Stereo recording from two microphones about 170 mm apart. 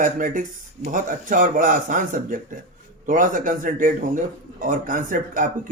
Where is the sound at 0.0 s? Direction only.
50° right (ahead or behind).